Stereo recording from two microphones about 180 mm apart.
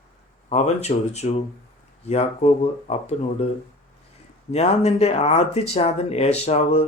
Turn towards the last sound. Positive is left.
turn(degrees=35)  # may be behind; listen again after turning